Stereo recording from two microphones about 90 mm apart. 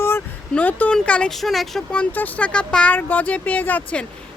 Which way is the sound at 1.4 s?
Centre (ahead or behind).